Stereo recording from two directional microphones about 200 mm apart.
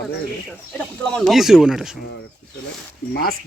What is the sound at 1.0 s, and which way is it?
Speech, 5° left (ahead or behind).